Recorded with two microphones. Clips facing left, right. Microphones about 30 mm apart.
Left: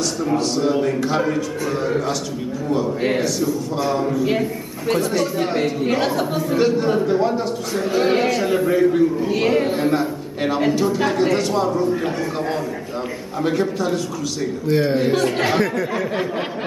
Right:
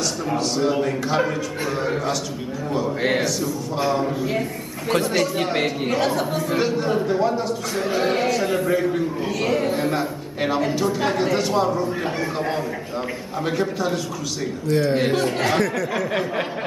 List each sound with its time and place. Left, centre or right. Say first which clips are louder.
0.2 s a man's voice: left 3 dB; centre
5.1 s speech: left 1 dB; centre
5.9 s a man's voice: left 2 dB; centre
9.3 s speech: left 3 dB; centre
9.8 s a man's voice: left 4 dB; centre
11.9 s speech: left 3 dB; centre
13.4 s a man's voice: left 3 dB; centre
14.7 s speech: left 2 dB; centre
15.0 s speech: left 2 dB; centre
15.2 s speech: left 2 dB; centre